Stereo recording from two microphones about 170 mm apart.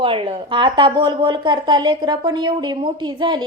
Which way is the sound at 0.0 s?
30° right (ahead or behind).